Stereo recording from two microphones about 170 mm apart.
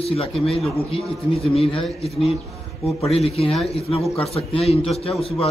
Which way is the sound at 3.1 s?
35° left (ahead or behind).